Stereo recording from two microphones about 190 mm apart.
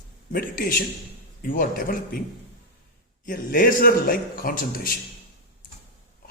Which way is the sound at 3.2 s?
50° left (ahead or behind).